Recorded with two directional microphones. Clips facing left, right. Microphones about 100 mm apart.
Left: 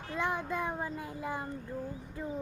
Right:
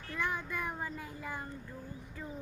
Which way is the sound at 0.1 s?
25° left (ahead or behind).